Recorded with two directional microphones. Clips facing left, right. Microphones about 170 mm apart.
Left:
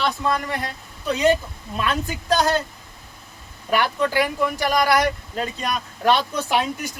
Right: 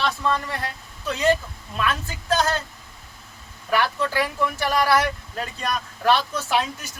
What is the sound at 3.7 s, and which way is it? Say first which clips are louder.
Speech: left 2 dB; 15° left (ahead or behind).